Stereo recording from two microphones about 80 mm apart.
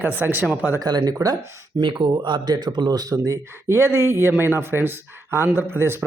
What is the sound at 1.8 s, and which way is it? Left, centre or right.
Speech, right.